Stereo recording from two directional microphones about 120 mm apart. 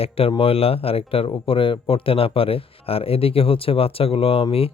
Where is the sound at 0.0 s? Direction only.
50° left (ahead or behind).